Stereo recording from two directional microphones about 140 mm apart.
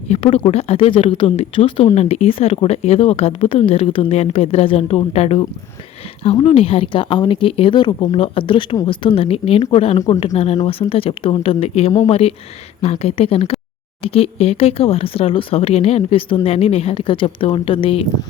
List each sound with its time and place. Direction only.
0.1 s speech: 45° left (ahead or behind)
2.0 s speech: 50° left (ahead or behind)